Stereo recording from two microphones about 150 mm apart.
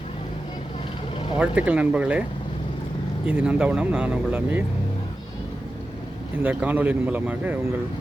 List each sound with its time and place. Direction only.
1.4 s speech: 10° right (ahead or behind)
3.2 s speech: 5° right (ahead or behind)
6.3 s speech: 10° right (ahead or behind)